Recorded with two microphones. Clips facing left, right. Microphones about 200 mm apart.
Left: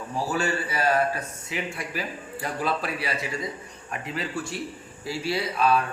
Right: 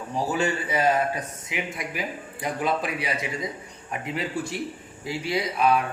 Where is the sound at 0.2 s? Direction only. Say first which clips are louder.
Right 1 dB; 20° right (ahead or behind).